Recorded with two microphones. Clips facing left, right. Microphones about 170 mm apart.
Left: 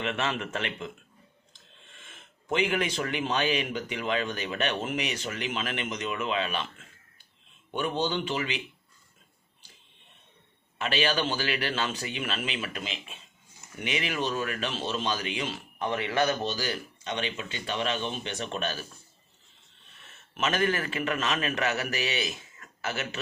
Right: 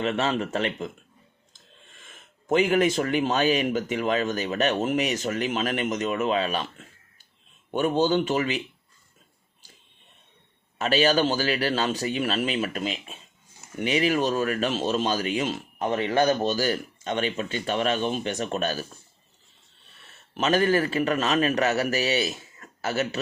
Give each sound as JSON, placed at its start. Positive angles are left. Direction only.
{"t": 0.0, "sound": "speech", "side_deg": -35}
{"t": 10.8, "sound": "speech", "side_deg": -40}
{"t": 20.0, "sound": "a man's voice", "side_deg": -35}